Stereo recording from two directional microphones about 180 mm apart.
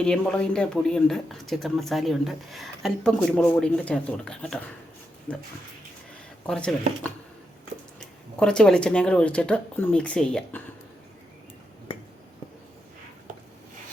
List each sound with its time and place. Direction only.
0.0 s speech: 5° left (ahead or behind)
6.5 s speech: 5° left (ahead or behind)
8.4 s speech: 5° left (ahead or behind)
11.9 s finger snapping: 30° left (ahead or behind)